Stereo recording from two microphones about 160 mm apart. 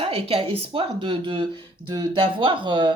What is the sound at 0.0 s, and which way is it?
A woman's voice, 35° right (ahead or behind).